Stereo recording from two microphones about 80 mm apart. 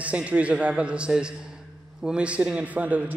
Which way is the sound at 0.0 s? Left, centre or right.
Centre.